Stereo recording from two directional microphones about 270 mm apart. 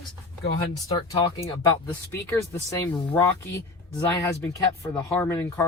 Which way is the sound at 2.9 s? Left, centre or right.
Centre.